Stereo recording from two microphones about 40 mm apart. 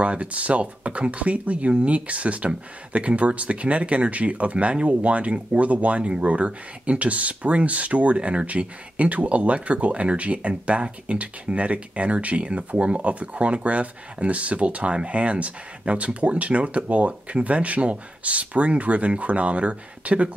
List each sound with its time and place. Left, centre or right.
0.0 s speech: right